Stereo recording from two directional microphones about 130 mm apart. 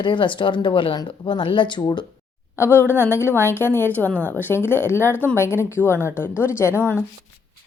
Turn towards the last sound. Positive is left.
turn(degrees=15)  # may be behind; listen again after turning